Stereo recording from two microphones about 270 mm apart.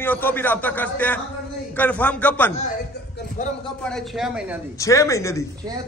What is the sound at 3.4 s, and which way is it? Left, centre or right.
Speech, left.